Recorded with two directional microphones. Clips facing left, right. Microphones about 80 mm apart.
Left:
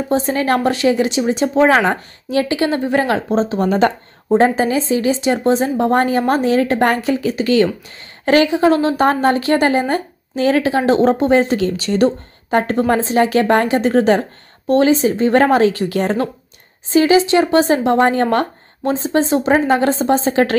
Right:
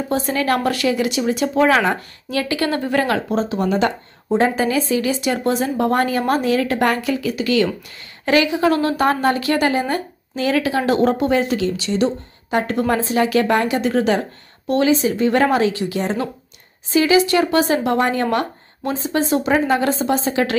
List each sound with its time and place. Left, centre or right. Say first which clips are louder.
0.1 s a woman's voice: left 3 dB; left
16.9 s a woman's voice: left 3 dB; left